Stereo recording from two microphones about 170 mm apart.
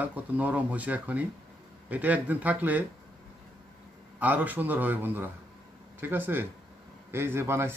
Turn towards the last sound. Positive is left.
turn(degrees=-15)  # may be behind; listen again after turning